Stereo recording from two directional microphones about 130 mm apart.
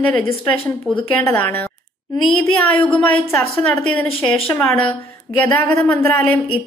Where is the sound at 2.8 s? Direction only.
5° left (ahead or behind).